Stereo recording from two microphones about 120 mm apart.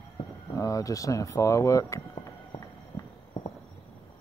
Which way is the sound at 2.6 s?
30° left (ahead or behind).